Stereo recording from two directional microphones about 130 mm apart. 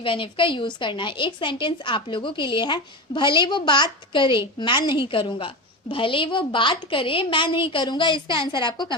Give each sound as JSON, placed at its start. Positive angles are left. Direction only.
{"t": 0.0, "sound": "a woman's voice", "side_deg": 40}